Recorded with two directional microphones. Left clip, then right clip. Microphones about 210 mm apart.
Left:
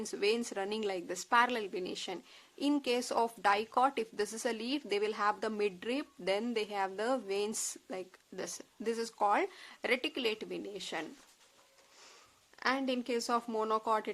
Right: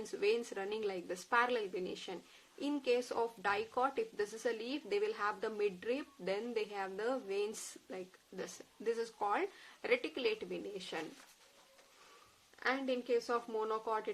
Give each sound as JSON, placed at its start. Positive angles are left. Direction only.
{"t": 0.0, "sound": "speech", "side_deg": 45}
{"t": 12.5, "sound": "speech", "side_deg": 50}